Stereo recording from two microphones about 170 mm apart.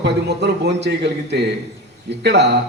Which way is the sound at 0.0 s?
75° right (ahead or behind).